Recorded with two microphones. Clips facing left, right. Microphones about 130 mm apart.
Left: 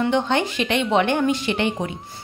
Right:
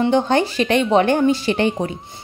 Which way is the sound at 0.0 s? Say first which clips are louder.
Right 4 dB; 35° right (ahead or behind).